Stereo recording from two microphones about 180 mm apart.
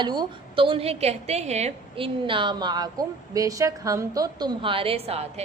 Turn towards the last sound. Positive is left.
turn(degrees=-35)  # may be behind; listen again after turning